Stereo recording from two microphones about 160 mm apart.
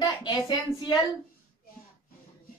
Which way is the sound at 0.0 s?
25° left (ahead or behind).